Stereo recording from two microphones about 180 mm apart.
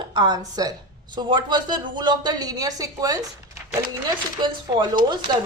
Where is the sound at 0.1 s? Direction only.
25° right (ahead or behind).